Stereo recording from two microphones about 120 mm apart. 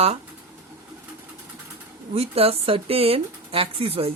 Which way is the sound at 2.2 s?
55° right (ahead or behind).